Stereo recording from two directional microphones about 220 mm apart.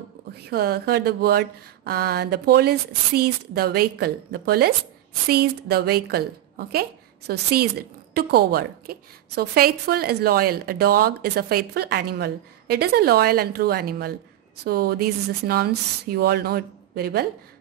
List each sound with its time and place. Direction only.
0.5 s a woman's voice: 45° right (ahead or behind)